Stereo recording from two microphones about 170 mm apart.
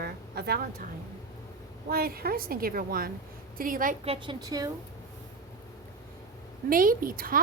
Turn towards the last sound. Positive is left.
turn(degrees=-55)  # may be behind; listen again after turning